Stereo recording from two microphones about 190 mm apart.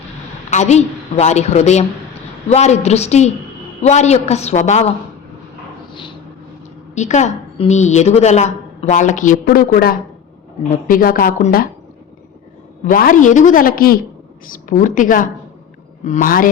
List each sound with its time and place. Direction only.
0.5 s a woman's voice: 35° left (ahead or behind)
6.9 s a woman's voice: 40° left (ahead or behind)
12.8 s a woman's voice: 45° left (ahead or behind)